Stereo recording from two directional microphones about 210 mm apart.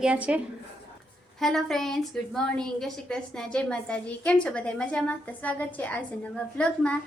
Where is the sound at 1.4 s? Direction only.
Centre (ahead or behind).